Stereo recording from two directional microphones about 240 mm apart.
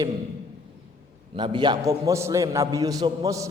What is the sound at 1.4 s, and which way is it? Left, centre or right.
A man's voice, centre.